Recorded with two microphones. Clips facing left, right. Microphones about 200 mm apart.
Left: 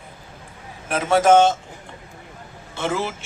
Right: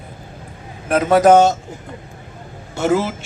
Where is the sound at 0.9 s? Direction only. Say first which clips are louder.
Right 4 dB; 40° right (ahead or behind).